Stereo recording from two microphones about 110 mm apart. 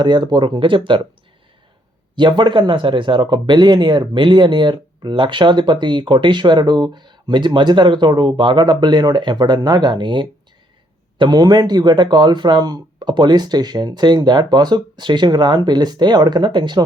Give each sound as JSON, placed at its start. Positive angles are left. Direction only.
{"t": 0.0, "sound": "speech", "side_deg": -40}
{"t": 2.1, "sound": "speech", "side_deg": -45}